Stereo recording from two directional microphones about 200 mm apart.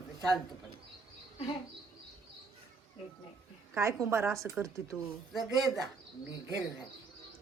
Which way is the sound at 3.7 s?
15° right (ahead or behind).